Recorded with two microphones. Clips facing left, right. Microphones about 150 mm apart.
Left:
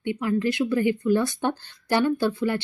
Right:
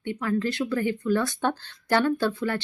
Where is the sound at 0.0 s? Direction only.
15° left (ahead or behind).